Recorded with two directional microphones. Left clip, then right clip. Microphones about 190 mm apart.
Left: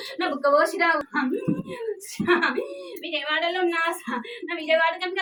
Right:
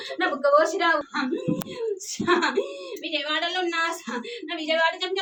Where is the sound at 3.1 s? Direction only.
15° right (ahead or behind).